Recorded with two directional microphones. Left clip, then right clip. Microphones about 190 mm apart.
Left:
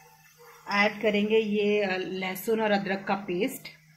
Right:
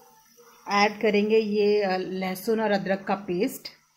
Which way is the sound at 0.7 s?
50° right (ahead or behind).